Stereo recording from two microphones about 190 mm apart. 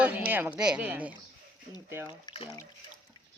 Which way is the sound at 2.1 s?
25° left (ahead or behind).